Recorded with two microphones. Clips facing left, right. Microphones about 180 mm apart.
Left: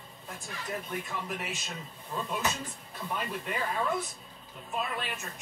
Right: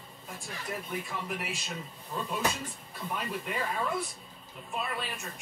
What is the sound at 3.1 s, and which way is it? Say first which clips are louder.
Speech: even; centre (ahead or behind).